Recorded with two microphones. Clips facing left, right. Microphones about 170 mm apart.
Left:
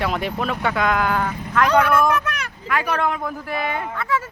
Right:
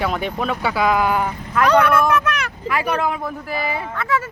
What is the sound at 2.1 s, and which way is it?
Vehicle, 85° right.